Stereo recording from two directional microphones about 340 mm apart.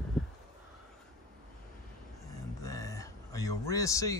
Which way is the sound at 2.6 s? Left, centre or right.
Centre.